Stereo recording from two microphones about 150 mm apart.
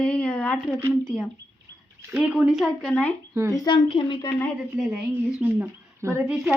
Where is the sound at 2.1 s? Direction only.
5° right (ahead or behind).